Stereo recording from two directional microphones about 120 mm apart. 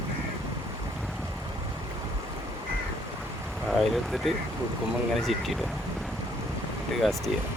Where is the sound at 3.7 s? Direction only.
Centre (ahead or behind).